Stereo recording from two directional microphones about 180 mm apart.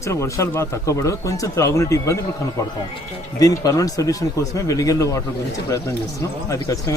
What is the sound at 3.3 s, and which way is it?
Speech, 20° left (ahead or behind).